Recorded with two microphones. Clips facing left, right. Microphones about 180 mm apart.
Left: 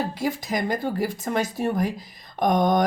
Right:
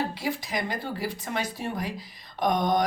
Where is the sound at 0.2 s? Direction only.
45° left (ahead or behind).